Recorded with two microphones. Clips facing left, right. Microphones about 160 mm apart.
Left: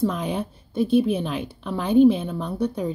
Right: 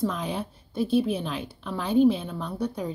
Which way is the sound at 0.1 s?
15° left (ahead or behind).